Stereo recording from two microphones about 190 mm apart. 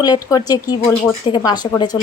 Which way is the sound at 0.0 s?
20° left (ahead or behind).